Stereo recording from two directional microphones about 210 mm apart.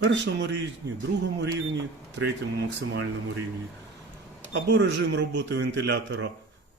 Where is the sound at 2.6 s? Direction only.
60° right (ahead or behind).